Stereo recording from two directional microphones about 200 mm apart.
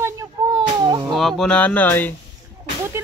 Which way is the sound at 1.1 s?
Centre (ahead or behind).